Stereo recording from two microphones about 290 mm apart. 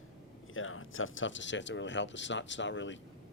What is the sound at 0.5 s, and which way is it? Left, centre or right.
Speech, left.